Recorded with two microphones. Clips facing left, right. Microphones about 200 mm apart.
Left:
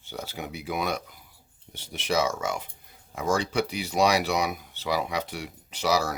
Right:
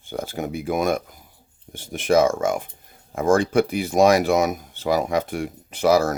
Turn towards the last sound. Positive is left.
turn(degrees=-50)  # may be behind; listen again after turning